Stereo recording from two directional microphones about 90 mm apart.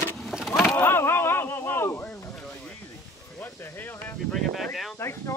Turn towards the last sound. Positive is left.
turn(degrees=30)  # may be behind; listen again after turning